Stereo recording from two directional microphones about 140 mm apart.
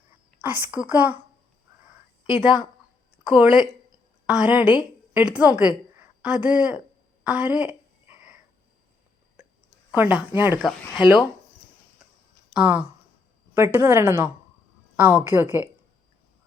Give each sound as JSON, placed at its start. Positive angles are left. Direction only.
{"t": 0.4, "sound": "a woman's voice", "side_deg": -10}
{"t": 2.4, "sound": "a woman's voice", "side_deg": -5}
{"t": 9.9, "sound": "a woman's voice", "side_deg": -10}
{"t": 10.9, "sound": "speech", "side_deg": 35}
{"t": 12.5, "sound": "a woman's voice", "side_deg": -10}